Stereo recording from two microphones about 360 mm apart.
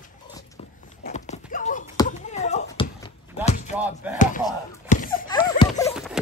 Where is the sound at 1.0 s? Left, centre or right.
Centre.